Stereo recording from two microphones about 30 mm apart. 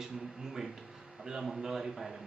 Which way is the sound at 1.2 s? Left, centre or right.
Centre.